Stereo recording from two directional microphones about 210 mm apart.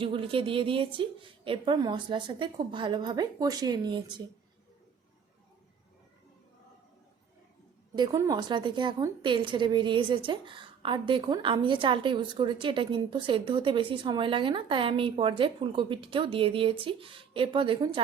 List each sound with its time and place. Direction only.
0.0 s a woman's voice: 25° right (ahead or behind)
7.9 s a woman's voice: 20° right (ahead or behind)